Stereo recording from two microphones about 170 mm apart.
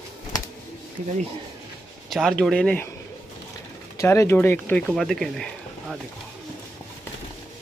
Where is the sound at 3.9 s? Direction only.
15° left (ahead or behind).